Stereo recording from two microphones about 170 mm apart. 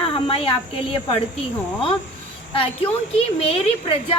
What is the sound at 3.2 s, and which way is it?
Speech, 35° left (ahead or behind).